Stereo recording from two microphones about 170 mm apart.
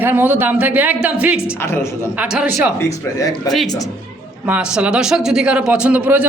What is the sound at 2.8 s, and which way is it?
Speech, 20° left (ahead or behind).